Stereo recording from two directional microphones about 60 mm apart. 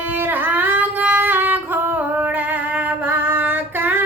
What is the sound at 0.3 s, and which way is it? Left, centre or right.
Singing, right.